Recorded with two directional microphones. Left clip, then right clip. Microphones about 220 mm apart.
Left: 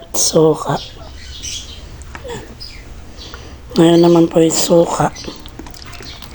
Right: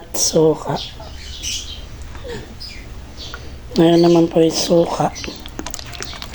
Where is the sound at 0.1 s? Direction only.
15° left (ahead or behind).